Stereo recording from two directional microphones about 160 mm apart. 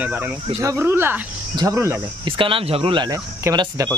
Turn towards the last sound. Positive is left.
turn(degrees=-25)  # may be behind; listen again after turning